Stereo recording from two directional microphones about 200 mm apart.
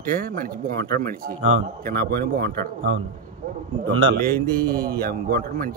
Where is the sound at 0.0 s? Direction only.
45° right (ahead or behind).